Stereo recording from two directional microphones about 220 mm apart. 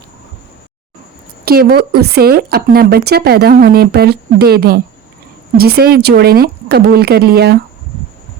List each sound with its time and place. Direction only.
1.5 s a woman's voice: 45° right (ahead or behind)